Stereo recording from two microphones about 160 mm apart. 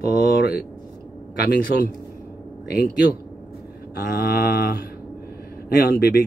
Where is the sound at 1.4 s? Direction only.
75° left (ahead or behind).